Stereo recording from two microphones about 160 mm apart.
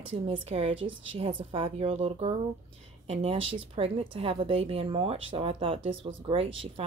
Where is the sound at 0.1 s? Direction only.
40° right (ahead or behind).